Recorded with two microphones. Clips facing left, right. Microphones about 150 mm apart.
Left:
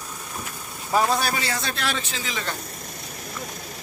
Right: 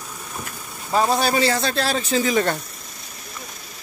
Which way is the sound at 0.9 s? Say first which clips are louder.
Right 3 dB; 20° right (ahead or behind).